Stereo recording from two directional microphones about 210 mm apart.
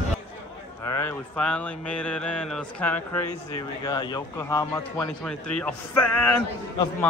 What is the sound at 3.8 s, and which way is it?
A man's voice, 20° left (ahead or behind).